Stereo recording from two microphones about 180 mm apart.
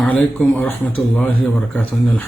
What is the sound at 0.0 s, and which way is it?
Speech, 5° left (ahead or behind).